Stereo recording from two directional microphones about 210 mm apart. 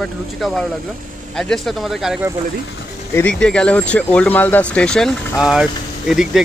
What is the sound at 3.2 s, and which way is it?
Speech, 5° left (ahead or behind).